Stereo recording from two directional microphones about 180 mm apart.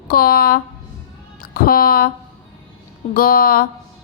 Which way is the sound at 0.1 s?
55° left (ahead or behind).